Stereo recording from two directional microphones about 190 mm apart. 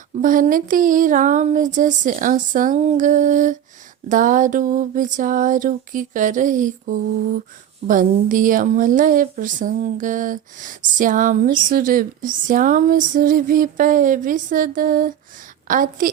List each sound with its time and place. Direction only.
0.2 s a woman's voice: 45° right (ahead or behind)